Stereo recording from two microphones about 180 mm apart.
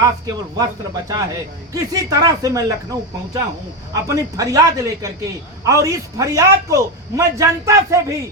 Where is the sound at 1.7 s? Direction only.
20° right (ahead or behind).